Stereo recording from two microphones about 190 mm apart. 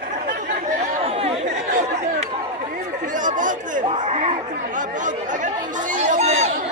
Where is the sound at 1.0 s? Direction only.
30° right (ahead or behind).